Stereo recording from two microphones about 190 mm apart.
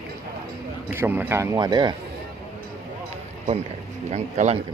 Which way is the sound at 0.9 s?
10° right (ahead or behind).